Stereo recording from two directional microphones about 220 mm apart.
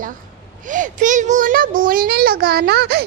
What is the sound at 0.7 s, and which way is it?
A child's voice, 35° right (ahead or behind).